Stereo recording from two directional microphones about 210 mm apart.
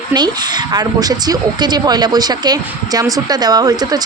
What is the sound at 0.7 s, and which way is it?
A woman's voice, 20° right (ahead or behind).